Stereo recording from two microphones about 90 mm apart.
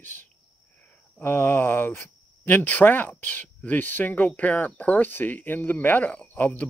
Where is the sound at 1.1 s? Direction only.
25° left (ahead or behind).